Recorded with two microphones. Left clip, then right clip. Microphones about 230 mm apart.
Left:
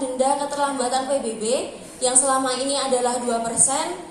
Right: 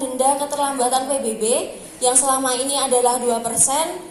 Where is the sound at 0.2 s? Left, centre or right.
Right.